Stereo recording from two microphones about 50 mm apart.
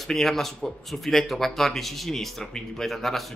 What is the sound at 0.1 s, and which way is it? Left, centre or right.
Speech, centre.